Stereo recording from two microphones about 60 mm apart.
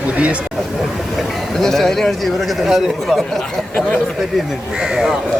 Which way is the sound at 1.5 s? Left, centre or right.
Centre.